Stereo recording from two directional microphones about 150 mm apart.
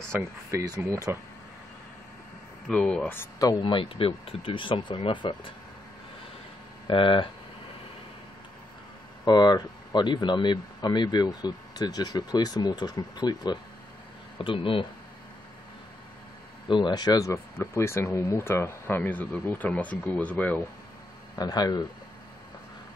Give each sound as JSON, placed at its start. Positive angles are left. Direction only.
{"t": 0.5, "sound": "speech", "side_deg": -20}
{"t": 2.7, "sound": "speech", "side_deg": 5}
{"t": 3.3, "sound": "speech", "side_deg": 30}
{"t": 6.9, "sound": "speech", "side_deg": 35}
{"t": 9.2, "sound": "speech", "side_deg": 25}
{"t": 16.6, "sound": "speech", "side_deg": 30}
{"t": 21.4, "sound": "speech", "side_deg": 25}